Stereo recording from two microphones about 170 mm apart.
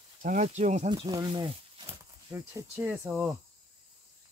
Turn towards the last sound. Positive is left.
turn(degrees=-10)  # may be behind; listen again after turning